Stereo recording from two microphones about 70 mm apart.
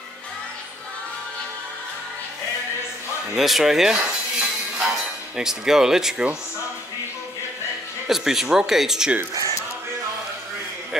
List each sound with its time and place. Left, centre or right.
3.3 s speech: centre
3.9 s music: centre
5.4 s speech: centre
8.1 s speech: centre